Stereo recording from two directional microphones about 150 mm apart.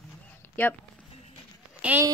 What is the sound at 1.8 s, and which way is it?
Speech, 10° right (ahead or behind).